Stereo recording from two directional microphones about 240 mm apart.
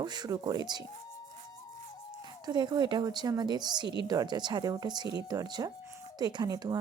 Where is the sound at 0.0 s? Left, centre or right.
Centre.